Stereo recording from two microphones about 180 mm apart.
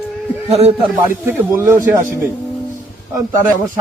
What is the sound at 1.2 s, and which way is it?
Speech, 10° right (ahead or behind).